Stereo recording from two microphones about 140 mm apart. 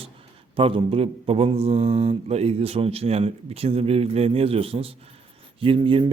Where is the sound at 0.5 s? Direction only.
40° right (ahead or behind).